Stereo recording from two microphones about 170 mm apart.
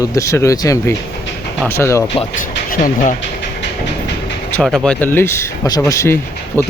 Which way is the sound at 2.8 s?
50° left (ahead or behind).